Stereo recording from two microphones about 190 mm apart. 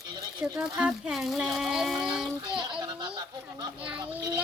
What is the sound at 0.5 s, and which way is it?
Speech, 10° right (ahead or behind).